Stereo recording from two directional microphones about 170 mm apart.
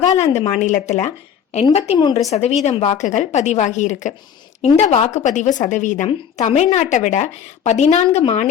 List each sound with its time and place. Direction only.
0.2 s a woman's voice: 40° left (ahead or behind)
8.0 s a woman's voice: 25° left (ahead or behind)